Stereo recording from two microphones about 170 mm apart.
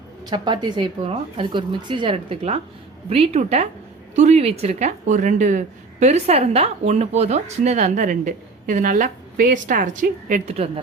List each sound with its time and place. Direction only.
0.3 s a woman's voice: 25° right (ahead or behind)